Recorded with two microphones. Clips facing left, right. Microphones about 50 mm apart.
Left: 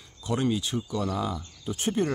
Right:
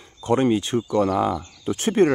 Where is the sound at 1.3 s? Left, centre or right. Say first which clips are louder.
Right 7 dB; right.